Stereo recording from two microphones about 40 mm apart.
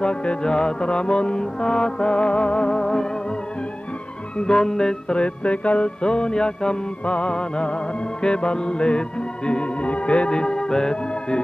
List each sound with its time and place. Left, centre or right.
0.0 s music: left
2.8 s music: centre
4.4 s music: centre
5.2 s music: left